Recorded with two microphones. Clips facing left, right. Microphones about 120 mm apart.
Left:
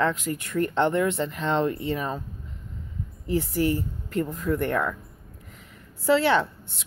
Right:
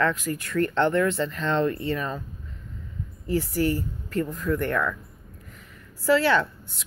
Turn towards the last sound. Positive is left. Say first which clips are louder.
# even
turn(degrees=25)  # may be behind; listen again after turning